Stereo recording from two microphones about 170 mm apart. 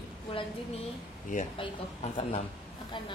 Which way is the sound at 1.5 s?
30° left (ahead or behind).